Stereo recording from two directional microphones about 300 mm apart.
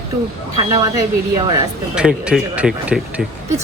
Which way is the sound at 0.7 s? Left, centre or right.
Centre.